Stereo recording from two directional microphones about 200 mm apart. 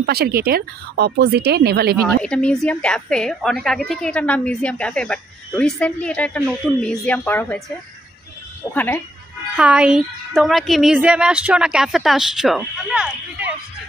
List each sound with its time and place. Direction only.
0.0 s a woman's voice: 50° right (ahead or behind)
2.0 s a woman's voice: 5° left (ahead or behind)
8.7 s speech: 10° left (ahead or behind)
9.6 s a woman's voice: 5° right (ahead or behind)